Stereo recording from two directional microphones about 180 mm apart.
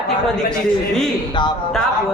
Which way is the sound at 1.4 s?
25° left (ahead or behind).